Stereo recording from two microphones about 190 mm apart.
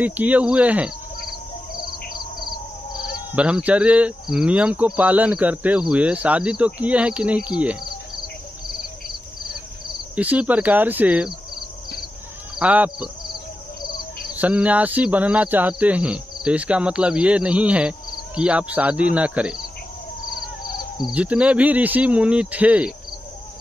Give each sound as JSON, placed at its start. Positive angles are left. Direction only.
{"t": 0.0, "sound": "speech", "side_deg": -10}
{"t": 3.3, "sound": "speech", "side_deg": -5}
{"t": 10.1, "sound": "speech", "side_deg": -5}
{"t": 12.5, "sound": "speech", "side_deg": -5}
{"t": 14.3, "sound": "speech", "side_deg": -5}
{"t": 20.3, "sound": "bird", "side_deg": 20}
{"t": 21.1, "sound": "speech", "side_deg": -5}